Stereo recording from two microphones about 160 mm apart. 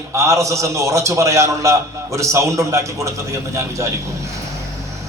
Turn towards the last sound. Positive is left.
turn(degrees=-20)  # may be behind; listen again after turning